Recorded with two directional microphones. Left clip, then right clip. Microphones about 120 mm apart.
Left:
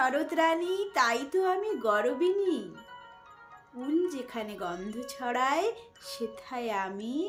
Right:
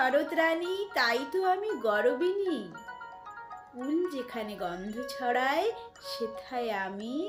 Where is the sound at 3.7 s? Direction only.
20° left (ahead or behind).